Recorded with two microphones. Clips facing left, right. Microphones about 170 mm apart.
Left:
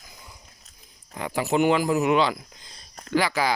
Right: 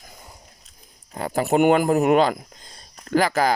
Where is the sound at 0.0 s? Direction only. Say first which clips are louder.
Right 3 dB; 50° right (ahead or behind).